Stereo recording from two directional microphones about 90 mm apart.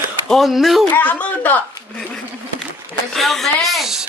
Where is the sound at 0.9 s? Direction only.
20° left (ahead or behind).